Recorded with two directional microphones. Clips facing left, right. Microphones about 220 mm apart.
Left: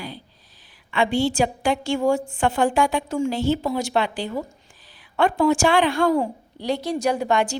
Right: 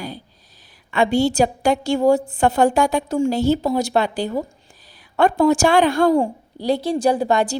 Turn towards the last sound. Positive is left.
turn(degrees=-35)  # may be behind; listen again after turning